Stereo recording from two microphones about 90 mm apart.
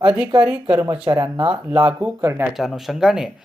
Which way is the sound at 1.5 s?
15° right (ahead or behind).